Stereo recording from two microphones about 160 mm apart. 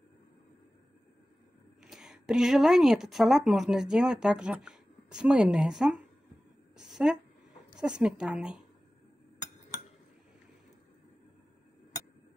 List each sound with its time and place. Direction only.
1.8 s a woman's voice: centre (ahead or behind)
6.8 s a sound: 5° right (ahead or behind)
7.8 s speech: 5° right (ahead or behind)